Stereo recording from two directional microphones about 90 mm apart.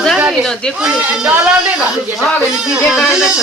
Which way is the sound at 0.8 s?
10° right (ahead or behind).